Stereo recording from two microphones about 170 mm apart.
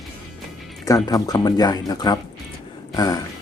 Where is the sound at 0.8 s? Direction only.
20° left (ahead or behind).